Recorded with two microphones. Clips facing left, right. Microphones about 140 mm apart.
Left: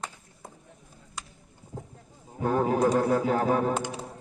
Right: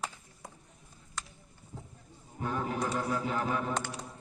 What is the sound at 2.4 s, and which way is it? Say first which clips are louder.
A man's voice: left 9 dB; 50° left (ahead or behind).